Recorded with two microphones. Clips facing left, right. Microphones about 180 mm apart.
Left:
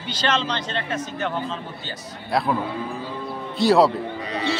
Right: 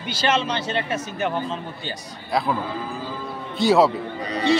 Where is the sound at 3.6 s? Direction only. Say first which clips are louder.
Even; centre (ahead or behind).